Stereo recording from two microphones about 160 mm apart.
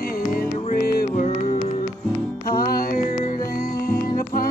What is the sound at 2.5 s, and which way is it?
Music, 70° left (ahead or behind).